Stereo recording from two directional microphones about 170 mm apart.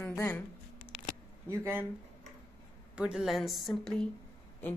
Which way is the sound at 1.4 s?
15° right (ahead or behind).